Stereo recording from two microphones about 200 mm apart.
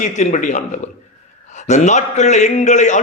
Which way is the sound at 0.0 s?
40° left (ahead or behind).